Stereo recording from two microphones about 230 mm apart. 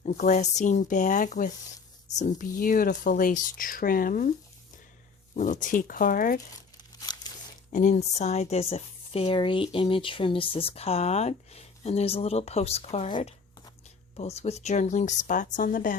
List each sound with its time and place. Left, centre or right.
0.0 s speech: left
5.4 s speech: left
7.1 s tearing: centre
7.7 s speech: left